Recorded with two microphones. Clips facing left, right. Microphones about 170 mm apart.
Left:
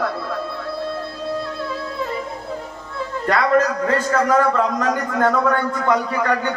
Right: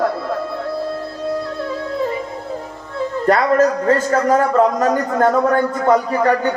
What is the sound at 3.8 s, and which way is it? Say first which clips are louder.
A man's voice: right 3 dB; 40° right (ahead or behind).